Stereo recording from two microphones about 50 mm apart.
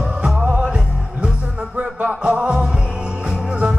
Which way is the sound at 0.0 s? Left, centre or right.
Centre.